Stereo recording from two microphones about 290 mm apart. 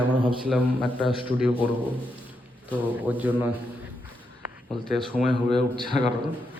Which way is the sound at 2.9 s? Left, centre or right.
Centre.